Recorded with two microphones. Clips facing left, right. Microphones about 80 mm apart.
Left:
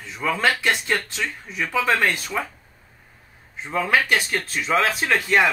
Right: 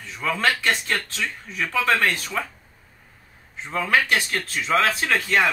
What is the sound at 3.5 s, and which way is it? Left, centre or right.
Speech, centre.